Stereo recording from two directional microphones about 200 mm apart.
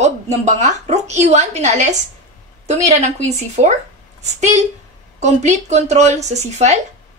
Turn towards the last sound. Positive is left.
turn(degrees=-35)  # may be behind; listen again after turning